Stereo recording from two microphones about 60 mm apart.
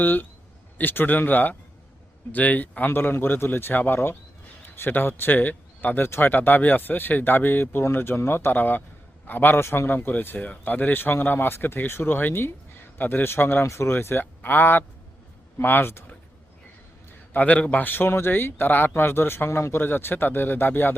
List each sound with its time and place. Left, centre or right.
0.0 s speech: left
17.3 s speech: left